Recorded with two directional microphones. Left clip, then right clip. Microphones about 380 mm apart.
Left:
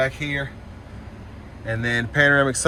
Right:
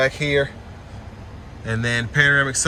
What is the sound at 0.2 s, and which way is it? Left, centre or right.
Speech, centre.